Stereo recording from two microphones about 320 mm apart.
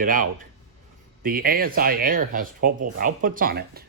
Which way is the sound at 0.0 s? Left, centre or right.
Right.